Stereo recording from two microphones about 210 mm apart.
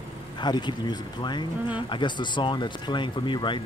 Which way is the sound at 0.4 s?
20° left (ahead or behind).